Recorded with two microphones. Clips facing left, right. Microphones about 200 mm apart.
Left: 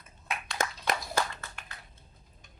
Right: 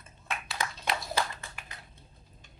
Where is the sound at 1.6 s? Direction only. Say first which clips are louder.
Even; 5° right (ahead or behind).